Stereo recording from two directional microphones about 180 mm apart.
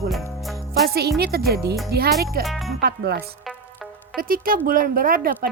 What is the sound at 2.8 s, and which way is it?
Speech, 65° right (ahead or behind).